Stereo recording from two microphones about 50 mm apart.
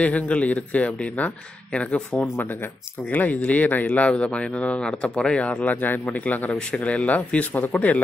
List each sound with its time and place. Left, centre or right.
0.0 s speech: left